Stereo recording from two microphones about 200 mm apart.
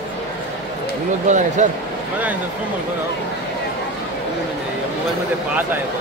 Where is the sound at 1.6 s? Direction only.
35° right (ahead or behind).